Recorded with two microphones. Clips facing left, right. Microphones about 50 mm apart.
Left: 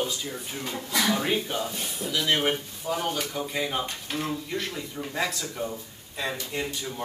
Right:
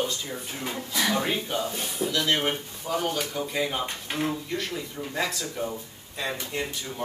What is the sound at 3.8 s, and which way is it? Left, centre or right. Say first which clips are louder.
Speech: right 2 dB; right.